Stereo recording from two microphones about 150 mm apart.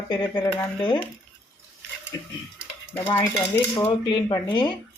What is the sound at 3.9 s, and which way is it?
Speech, 25° left (ahead or behind).